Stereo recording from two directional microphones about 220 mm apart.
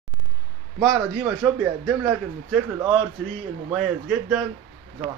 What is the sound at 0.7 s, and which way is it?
A man's voice, 10° right (ahead or behind).